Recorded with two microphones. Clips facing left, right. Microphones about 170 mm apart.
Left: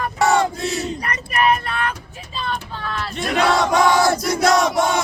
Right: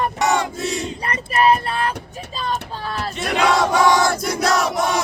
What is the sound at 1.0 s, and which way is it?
Child singing, 30° right (ahead or behind).